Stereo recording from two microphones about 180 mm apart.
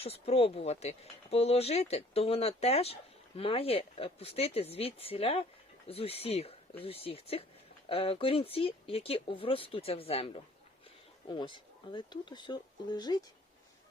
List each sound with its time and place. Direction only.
0.0 s speech: 35° left (ahead or behind)